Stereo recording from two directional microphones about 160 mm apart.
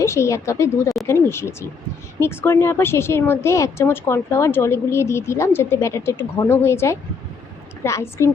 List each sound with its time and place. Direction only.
0.0 s speech: 15° left (ahead or behind)